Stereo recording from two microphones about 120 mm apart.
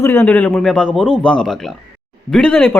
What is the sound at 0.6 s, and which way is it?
Speech, 5° left (ahead or behind).